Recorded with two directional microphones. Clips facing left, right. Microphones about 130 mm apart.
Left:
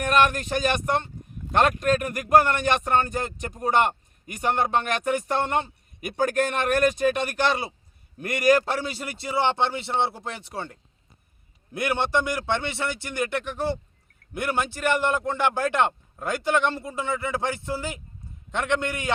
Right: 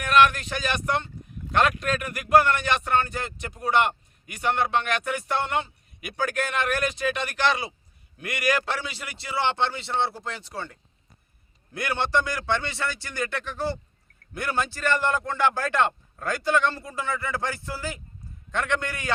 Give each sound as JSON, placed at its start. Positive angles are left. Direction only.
{"t": 0.0, "sound": "a man's voice", "side_deg": 40}
{"t": 9.3, "sound": "a man's voice", "side_deg": 15}